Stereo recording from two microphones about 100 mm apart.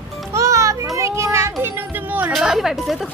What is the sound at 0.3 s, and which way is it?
Music, 30° right (ahead or behind).